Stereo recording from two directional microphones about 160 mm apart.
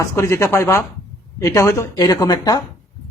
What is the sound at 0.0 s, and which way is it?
A woman's voice, 20° left (ahead or behind).